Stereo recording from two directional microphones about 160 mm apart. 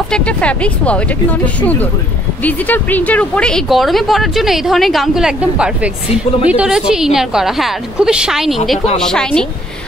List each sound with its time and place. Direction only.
0.1 s speech: 5° left (ahead or behind)